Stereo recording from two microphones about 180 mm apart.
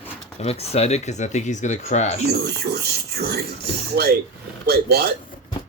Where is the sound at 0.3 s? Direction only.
35° left (ahead or behind).